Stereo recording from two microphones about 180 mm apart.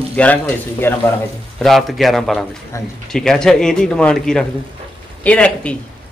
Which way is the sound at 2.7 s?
15° left (ahead or behind).